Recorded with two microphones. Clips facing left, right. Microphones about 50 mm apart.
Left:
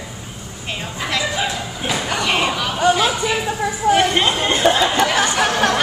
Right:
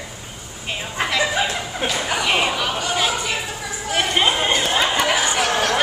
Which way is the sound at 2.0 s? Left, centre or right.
Centre.